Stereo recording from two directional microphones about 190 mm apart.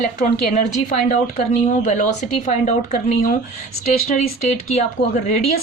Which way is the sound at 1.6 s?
40° left (ahead or behind).